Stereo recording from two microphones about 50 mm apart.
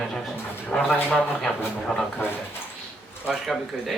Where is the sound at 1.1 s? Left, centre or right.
Right.